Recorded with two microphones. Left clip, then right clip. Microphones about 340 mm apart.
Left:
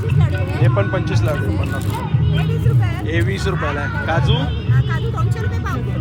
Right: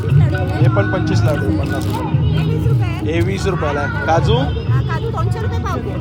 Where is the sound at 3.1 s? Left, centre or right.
Centre.